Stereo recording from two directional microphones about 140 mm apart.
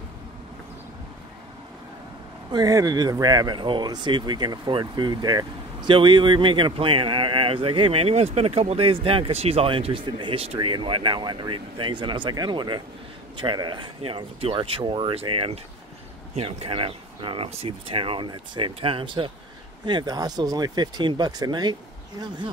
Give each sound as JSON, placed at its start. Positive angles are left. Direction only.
{"t": 2.5, "sound": "speech", "side_deg": -25}